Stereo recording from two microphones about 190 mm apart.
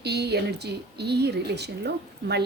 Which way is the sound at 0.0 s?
60° right (ahead or behind).